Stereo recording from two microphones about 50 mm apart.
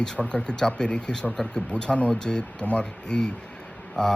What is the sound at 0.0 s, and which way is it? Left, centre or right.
Speech, centre.